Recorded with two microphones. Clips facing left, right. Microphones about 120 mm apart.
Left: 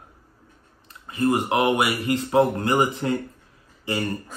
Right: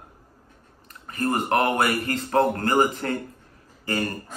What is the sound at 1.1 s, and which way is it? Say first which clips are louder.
Speech: left 2 dB; 15° left (ahead or behind).